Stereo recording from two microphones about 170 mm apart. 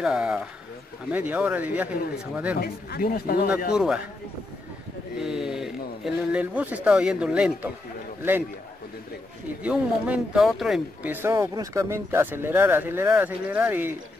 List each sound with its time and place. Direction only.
0.0 s speech: 5° right (ahead or behind)
2.6 s speech: 60° left (ahead or behind)
3.7 s speech: 5° right (ahead or behind)
5.2 s a man's voice: 5° right (ahead or behind)
9.6 s speech: 5° right (ahead or behind)